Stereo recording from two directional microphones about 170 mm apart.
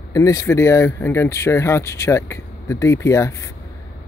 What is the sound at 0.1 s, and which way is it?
Speech, 20° left (ahead or behind).